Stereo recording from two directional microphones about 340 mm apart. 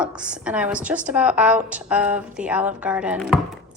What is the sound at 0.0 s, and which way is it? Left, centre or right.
A woman's voice, centre.